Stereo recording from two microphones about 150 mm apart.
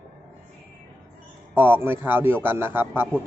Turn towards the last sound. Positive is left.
turn(degrees=-15)  # may be behind; listen again after turning